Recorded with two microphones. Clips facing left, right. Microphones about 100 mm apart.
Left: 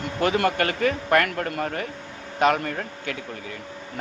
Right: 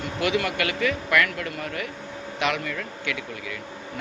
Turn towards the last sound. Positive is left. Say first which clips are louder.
# even
turn(degrees=40)  # may be behind; listen again after turning